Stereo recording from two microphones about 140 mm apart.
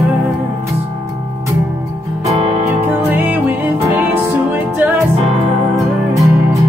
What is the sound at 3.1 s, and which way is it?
Music, 15° right (ahead or behind).